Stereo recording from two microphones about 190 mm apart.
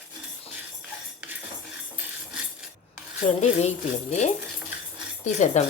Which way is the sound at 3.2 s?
35° left (ahead or behind).